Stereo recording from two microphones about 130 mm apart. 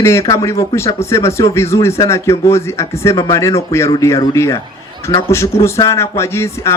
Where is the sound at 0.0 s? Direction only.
20° left (ahead or behind).